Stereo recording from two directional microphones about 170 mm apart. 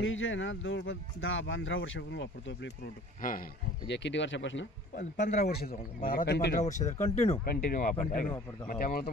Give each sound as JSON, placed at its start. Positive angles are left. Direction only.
{"t": 0.0, "sound": "speech", "side_deg": 90}
{"t": 3.2, "sound": "speech", "side_deg": 50}
{"t": 3.8, "sound": "speech", "side_deg": 90}
{"t": 5.2, "sound": "speech", "side_deg": 45}
{"t": 5.5, "sound": "speech", "side_deg": 65}
{"t": 6.6, "sound": "speech", "side_deg": 45}
{"t": 7.4, "sound": "speech", "side_deg": 60}